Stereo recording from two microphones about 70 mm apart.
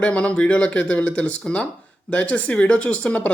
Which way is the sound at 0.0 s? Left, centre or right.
Centre.